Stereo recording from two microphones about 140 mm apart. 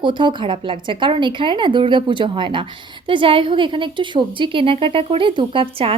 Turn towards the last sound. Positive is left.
turn(degrees=-40)  # may be behind; listen again after turning